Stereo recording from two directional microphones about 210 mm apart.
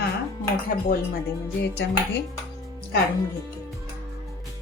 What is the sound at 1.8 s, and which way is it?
Music, 55° left (ahead or behind).